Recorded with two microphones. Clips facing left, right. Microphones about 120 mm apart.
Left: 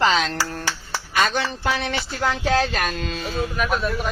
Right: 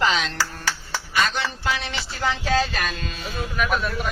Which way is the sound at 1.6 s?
55° left (ahead or behind).